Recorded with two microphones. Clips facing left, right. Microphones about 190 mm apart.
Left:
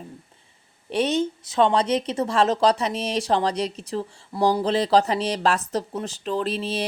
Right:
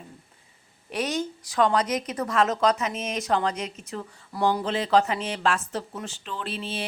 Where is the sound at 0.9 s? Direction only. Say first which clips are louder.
Left 6 dB; 25° left (ahead or behind).